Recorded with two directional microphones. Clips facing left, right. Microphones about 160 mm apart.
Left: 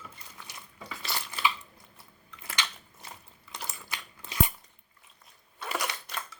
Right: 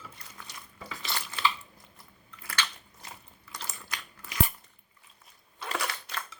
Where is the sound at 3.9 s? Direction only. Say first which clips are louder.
Left 1 dB; 25° left (ahead or behind).